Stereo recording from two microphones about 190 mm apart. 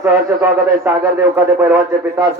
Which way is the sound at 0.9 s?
15° right (ahead or behind).